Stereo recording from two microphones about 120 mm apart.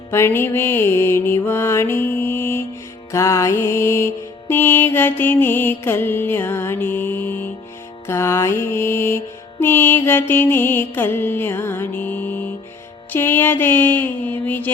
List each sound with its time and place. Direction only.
0.1 s music: 20° left (ahead or behind)